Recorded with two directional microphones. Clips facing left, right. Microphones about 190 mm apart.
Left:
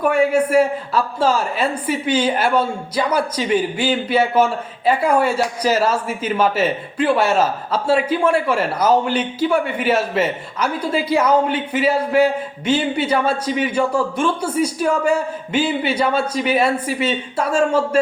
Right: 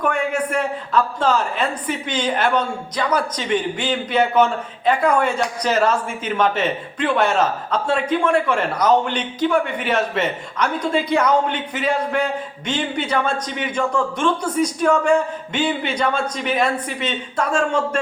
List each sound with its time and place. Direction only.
0.0 s a man's voice: 10° left (ahead or behind)